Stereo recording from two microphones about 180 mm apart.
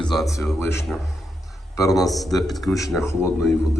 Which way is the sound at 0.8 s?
Centre (ahead or behind).